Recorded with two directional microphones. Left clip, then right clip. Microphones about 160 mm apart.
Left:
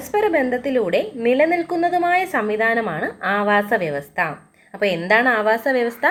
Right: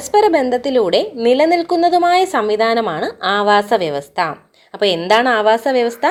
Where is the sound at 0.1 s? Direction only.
30° right (ahead or behind).